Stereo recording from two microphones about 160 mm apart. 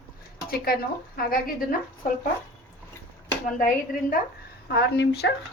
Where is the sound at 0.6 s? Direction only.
70° left (ahead or behind).